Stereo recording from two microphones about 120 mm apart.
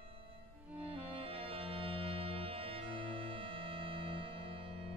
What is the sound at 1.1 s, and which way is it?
Music, 50° right (ahead or behind).